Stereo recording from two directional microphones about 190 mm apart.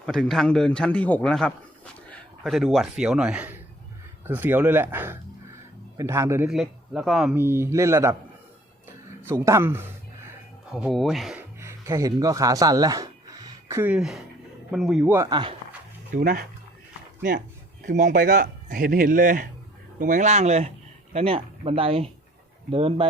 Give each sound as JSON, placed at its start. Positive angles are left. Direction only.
{"t": 0.0, "sound": "a man's voice", "side_deg": 0}
{"t": 6.5, "sound": "speech", "side_deg": 0}
{"t": 7.3, "sound": "speech", "side_deg": -10}
{"t": 9.2, "sound": "speech", "side_deg": -15}
{"t": 10.7, "sound": "speech", "side_deg": 0}
{"t": 11.6, "sound": "speech", "side_deg": -15}
{"t": 16.1, "sound": "speech", "side_deg": -45}
{"t": 17.8, "sound": "speech", "side_deg": -40}